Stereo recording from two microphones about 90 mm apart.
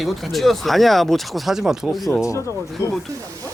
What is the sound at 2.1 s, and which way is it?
Speech, 35° left (ahead or behind).